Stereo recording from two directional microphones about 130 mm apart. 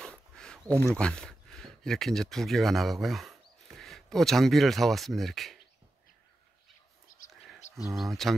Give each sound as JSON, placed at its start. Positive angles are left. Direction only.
{"t": 0.0, "sound": "a sound", "side_deg": 5}
{"t": 0.9, "sound": "speech", "side_deg": 5}
{"t": 7.1, "sound": "whispering", "side_deg": 90}
{"t": 7.7, "sound": "speech", "side_deg": 0}